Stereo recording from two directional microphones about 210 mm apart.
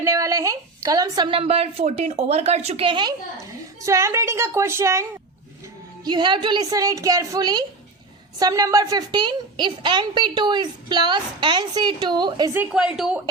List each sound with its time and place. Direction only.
0.0 s a woman's voice: 15° right (ahead or behind)
6.1 s a woman's voice: 20° right (ahead or behind)
12.5 s a woman's voice: 5° right (ahead or behind)